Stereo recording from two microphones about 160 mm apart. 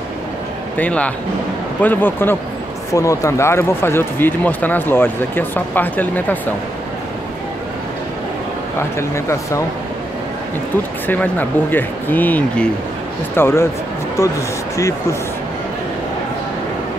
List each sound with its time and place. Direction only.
0.7 s speech: 10° left (ahead or behind)
8.7 s speech: 15° left (ahead or behind)
11.1 s speech: 10° left (ahead or behind)